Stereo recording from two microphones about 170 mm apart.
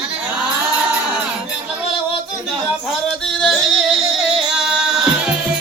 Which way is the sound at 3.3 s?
Centre (ahead or behind).